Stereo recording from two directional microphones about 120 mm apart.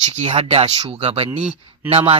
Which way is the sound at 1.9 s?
50° right (ahead or behind).